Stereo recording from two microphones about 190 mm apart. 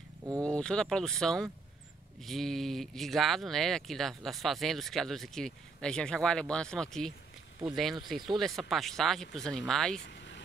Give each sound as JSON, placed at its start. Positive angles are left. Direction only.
{"t": 0.4, "sound": "speech", "side_deg": 5}
{"t": 10.0, "sound": "vehicle", "side_deg": 65}